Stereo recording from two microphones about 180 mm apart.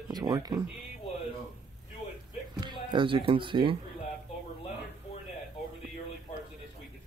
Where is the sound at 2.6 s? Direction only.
25° right (ahead or behind).